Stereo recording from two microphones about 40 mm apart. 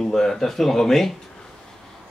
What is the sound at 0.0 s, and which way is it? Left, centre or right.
Speech, centre.